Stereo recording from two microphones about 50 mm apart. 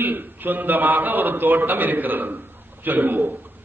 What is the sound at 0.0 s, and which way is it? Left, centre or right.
A man's voice, right.